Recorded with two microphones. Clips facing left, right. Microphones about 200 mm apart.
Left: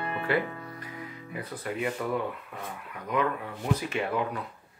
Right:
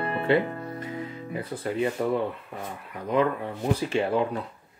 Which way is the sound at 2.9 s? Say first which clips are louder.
Right 5 dB; 30° right (ahead or behind).